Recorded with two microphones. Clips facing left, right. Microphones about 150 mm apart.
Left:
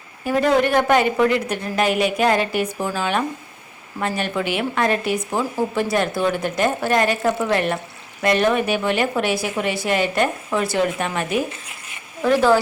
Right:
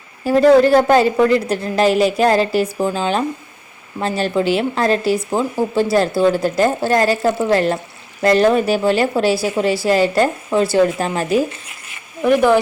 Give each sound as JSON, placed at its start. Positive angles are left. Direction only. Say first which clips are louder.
{"t": 0.3, "sound": "speech", "louder": "right 7 dB", "side_deg": -35}
{"t": 12.2, "sound": "speech", "louder": "right 3 dB", "side_deg": -15}